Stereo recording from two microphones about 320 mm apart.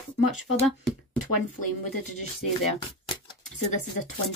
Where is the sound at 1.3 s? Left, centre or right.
Left.